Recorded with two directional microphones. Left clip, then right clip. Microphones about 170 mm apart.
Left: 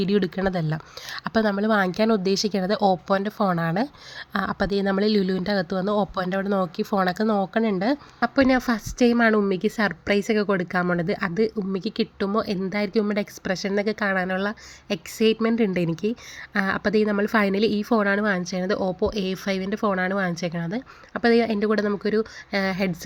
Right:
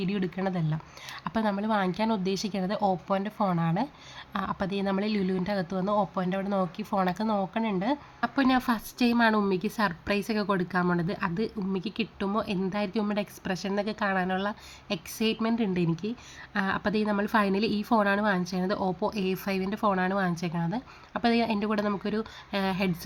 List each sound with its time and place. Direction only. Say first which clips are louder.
0.0 s a woman's voice: left 8 dB; 30° left (ahead or behind)